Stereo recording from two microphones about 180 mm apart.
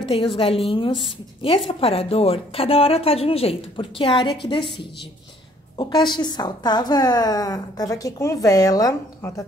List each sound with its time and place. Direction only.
0.1 s a woman's voice: 30° left (ahead or behind)
5.8 s a woman's voice: 25° left (ahead or behind)